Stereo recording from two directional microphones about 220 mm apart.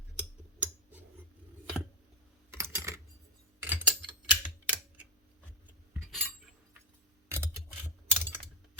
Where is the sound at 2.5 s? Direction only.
10° right (ahead or behind).